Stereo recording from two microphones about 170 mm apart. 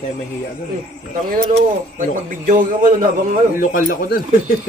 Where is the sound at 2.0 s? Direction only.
50° right (ahead or behind).